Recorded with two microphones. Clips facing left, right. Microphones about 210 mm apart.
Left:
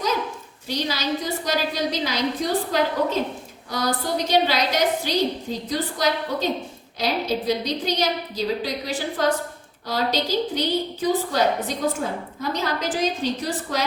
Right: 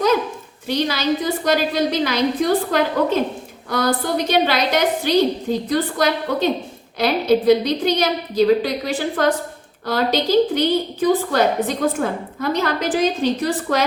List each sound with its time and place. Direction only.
0.7 s a woman's voice: 60° right (ahead or behind)